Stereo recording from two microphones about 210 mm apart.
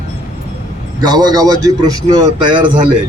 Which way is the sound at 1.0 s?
20° right (ahead or behind).